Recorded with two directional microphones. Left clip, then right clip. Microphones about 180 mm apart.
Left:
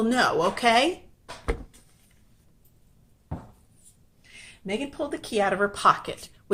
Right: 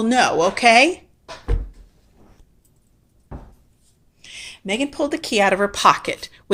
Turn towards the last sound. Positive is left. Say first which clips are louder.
# right 6 dB
turn(degrees=-30)  # may be behind; listen again after turning